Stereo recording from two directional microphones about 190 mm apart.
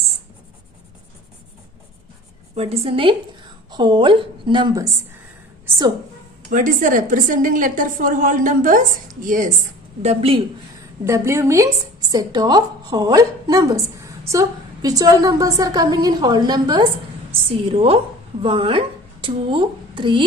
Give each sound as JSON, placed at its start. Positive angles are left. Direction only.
{"t": 2.6, "sound": "a woman's voice", "side_deg": -30}
{"t": 5.6, "sound": "a sound", "side_deg": -20}
{"t": 6.5, "sound": "a woman's voice", "side_deg": -45}
{"t": 10.0, "sound": "a woman's voice", "side_deg": -30}
{"t": 11.0, "sound": "a woman's voice", "side_deg": -15}